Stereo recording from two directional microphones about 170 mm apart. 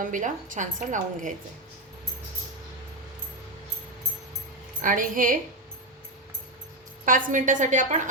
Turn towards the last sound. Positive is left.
turn(degrees=-45)  # may be behind; listen again after turning